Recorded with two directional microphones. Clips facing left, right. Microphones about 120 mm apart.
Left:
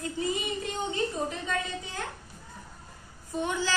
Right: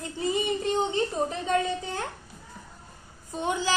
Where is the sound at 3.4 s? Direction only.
20° right (ahead or behind).